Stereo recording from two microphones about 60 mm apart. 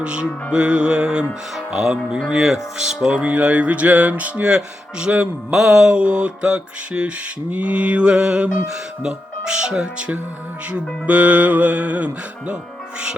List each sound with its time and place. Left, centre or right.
0.0 s mantra: centre
2.3 s speech: centre; by 4.4 s right
4.4 s mantra: centre
7.5 s speech: right
9.0 s mantra: centre
10.7 s speech: right